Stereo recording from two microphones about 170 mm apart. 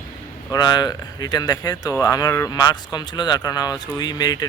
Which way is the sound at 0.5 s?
25° left (ahead or behind).